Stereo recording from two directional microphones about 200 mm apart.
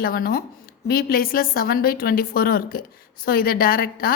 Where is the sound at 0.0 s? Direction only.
45° left (ahead or behind).